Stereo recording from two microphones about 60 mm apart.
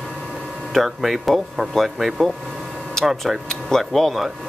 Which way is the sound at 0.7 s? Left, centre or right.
Centre.